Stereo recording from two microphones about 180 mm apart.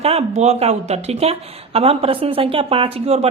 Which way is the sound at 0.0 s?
35° right (ahead or behind).